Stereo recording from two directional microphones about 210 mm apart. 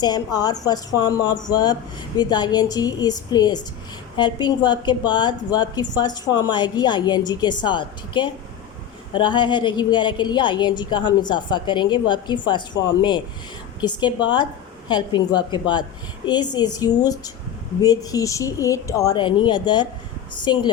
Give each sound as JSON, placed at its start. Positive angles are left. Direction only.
{"t": 0.0, "sound": "a woman's voice", "side_deg": 20}